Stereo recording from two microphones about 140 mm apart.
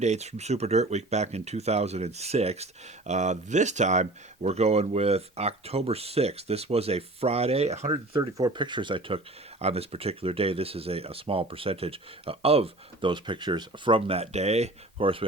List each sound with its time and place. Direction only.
0.0 s speech: 55° right (ahead or behind)
7.9 s speech: 35° right (ahead or behind)